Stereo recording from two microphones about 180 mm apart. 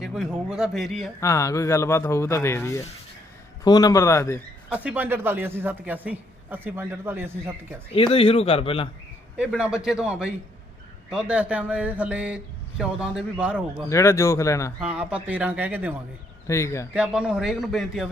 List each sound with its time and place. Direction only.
0.0 s a man's voice: centre (ahead or behind)
1.2 s speech: 15° left (ahead or behind)
4.7 s a man's voice: 5° right (ahead or behind)
7.9 s a man's voice: 30° left (ahead or behind)
9.4 s a man's voice: 5° right (ahead or behind)
13.9 s speech: 15° left (ahead or behind)
14.8 s a man's voice: 5° right (ahead or behind)
16.5 s speech: 15° left (ahead or behind)
16.9 s a man's voice: 5° right (ahead or behind)